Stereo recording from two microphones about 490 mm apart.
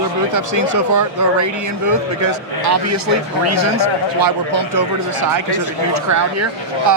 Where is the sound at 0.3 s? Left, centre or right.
Right.